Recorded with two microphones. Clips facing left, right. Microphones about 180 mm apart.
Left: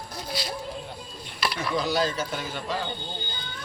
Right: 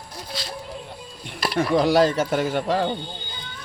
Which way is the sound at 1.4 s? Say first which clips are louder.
Right 7 dB; 45° right (ahead or behind).